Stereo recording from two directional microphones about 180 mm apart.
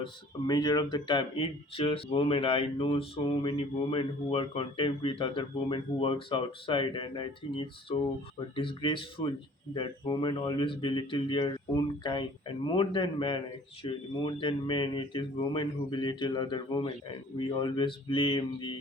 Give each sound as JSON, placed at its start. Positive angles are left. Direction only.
{"t": 0.0, "sound": "speech", "side_deg": 25}